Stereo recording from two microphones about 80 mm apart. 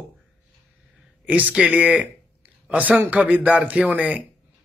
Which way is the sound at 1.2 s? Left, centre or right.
Centre.